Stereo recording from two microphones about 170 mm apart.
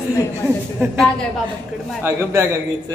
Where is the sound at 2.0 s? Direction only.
15° right (ahead or behind).